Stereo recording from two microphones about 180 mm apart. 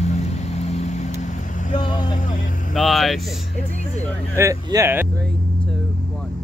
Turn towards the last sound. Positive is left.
turn(degrees=-15)  # may be behind; listen again after turning